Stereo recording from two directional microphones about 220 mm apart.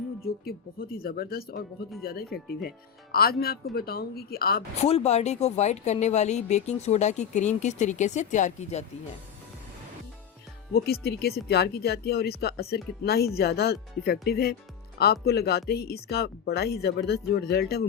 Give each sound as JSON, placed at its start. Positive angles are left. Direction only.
{"t": 0.3, "sound": "speech", "side_deg": 45}
{"t": 4.8, "sound": "a woman's voice", "side_deg": 30}
{"t": 10.8, "sound": "speech", "side_deg": 45}